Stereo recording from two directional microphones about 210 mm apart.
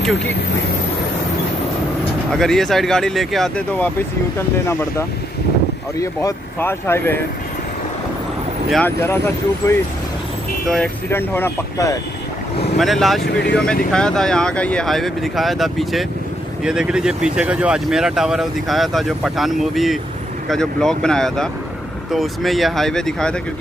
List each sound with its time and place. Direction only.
2.3 s speech: centre (ahead or behind)
8.6 s speech: centre (ahead or behind)
9.0 s speech: 10° left (ahead or behind)
12.7 s speech: centre (ahead or behind)
13.2 s speech: 50° left (ahead or behind)
13.9 s speech: 5° left (ahead or behind)